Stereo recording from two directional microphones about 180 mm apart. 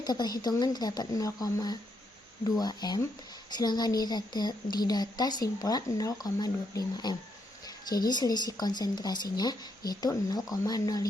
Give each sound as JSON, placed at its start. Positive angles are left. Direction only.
{"t": 0.0, "sound": "a woman's voice", "side_deg": 20}